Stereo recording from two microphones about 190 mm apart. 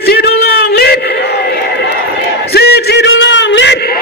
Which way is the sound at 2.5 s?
60° left (ahead or behind).